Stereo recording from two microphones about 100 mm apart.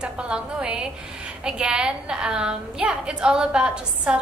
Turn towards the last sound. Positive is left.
turn(degrees=-10)  # may be behind; listen again after turning